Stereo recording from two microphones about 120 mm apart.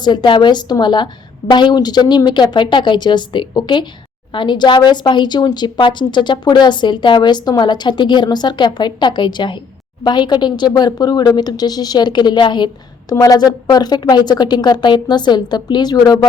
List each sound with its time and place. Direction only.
0.0 s speech: 40° left (ahead or behind)